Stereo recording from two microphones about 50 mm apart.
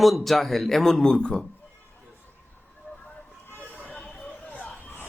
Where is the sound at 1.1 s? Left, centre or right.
Centre.